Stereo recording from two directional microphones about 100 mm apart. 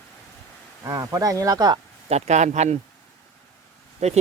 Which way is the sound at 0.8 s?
35° right (ahead or behind).